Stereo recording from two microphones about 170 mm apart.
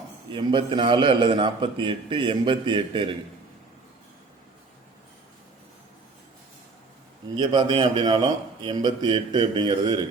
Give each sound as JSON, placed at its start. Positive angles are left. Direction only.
{"t": 0.3, "sound": "a man's voice", "side_deg": -30}
{"t": 7.3, "sound": "a man's voice", "side_deg": -25}